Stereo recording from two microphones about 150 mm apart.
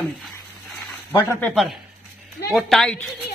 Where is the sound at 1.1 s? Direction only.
5° left (ahead or behind).